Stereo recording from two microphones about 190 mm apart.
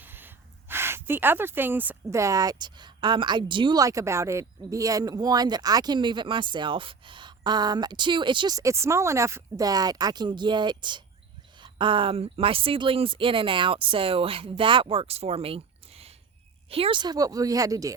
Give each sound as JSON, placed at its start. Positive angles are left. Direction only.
{"t": 0.0, "sound": "speech", "side_deg": -10}